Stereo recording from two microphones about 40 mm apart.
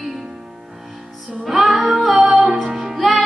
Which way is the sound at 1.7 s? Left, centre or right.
Centre.